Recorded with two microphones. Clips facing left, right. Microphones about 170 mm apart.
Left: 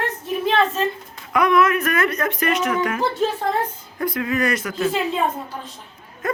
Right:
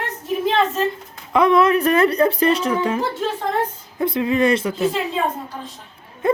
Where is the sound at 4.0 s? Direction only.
25° right (ahead or behind).